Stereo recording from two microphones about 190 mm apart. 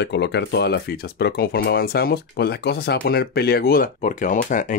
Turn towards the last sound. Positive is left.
turn(degrees=45)  # may be behind; listen again after turning